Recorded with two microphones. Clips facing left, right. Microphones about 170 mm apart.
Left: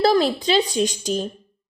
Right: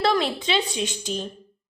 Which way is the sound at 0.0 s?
35° left (ahead or behind).